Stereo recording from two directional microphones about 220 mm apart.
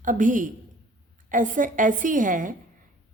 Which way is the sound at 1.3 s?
35° right (ahead or behind).